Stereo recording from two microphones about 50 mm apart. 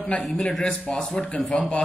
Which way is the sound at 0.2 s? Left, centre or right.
Centre.